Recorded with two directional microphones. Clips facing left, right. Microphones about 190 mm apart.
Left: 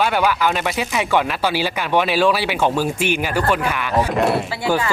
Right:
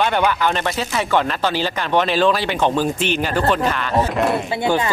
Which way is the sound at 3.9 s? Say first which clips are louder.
Left 1 dB; centre (ahead or behind).